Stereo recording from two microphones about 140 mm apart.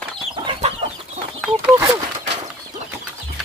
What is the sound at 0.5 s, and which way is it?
Chicken, 45° right (ahead or behind).